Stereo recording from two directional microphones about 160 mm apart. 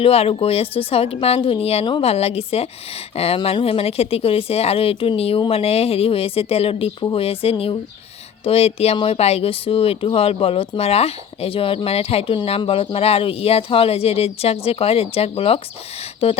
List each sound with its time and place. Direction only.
0.0 s speech: 35° left (ahead or behind)